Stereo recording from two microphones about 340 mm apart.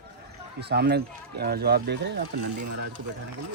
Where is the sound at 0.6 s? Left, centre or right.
Right.